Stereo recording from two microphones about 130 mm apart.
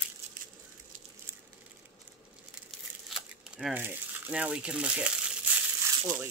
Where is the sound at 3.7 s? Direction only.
10° right (ahead or behind).